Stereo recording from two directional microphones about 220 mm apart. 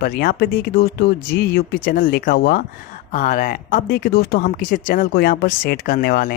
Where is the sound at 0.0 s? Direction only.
45° left (ahead or behind).